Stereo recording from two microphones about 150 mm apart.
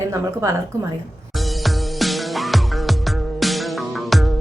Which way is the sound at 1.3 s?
Centre (ahead or behind).